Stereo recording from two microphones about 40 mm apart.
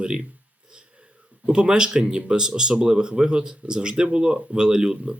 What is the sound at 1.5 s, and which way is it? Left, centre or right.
Speech, right.